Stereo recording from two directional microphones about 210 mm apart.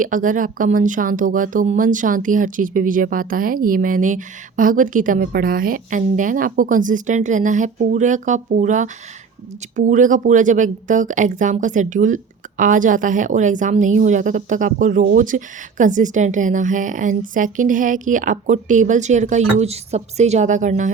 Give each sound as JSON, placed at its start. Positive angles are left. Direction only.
{"t": 0.0, "sound": "a woman's voice", "side_deg": -40}